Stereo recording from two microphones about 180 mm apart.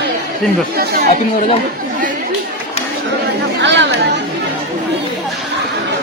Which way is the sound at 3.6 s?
80° right.